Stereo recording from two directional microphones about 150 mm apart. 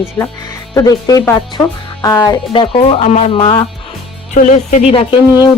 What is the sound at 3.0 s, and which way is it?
Speech, 50° left (ahead or behind).